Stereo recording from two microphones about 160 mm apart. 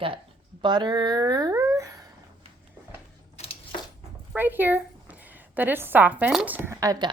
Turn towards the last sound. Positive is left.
turn(degrees=-20)  # may be behind; listen again after turning